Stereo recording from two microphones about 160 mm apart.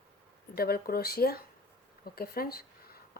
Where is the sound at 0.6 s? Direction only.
70° left (ahead or behind).